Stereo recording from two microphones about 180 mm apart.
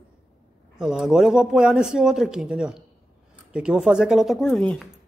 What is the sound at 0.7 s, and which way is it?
Speech, 5° right (ahead or behind).